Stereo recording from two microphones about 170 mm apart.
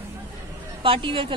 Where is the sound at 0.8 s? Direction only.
30° right (ahead or behind).